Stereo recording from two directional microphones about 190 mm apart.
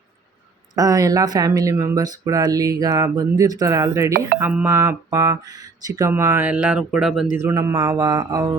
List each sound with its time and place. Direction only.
0.8 s speech: 20° right (ahead or behind)
7.3 s speech: 15° right (ahead or behind)